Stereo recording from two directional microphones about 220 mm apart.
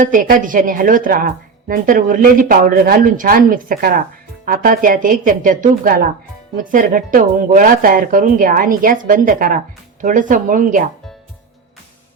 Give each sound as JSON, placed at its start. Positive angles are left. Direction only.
{"t": 0.0, "sound": "a woman's voice", "side_deg": -40}